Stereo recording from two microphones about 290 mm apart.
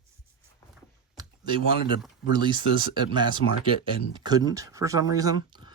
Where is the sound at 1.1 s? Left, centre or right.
Centre.